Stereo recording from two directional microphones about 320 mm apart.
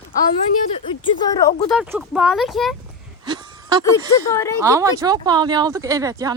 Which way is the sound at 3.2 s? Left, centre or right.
Centre.